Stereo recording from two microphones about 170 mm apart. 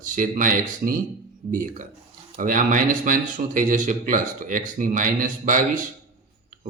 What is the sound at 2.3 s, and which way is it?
Speech, 50° right (ahead or behind).